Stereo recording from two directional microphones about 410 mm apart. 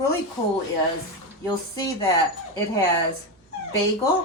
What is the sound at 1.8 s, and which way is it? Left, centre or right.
Speech, centre.